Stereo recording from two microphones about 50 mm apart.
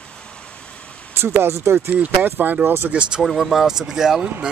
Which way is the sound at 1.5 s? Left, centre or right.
Right.